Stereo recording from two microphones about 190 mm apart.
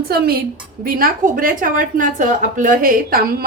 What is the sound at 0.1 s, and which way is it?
A woman's voice, 55° right (ahead or behind).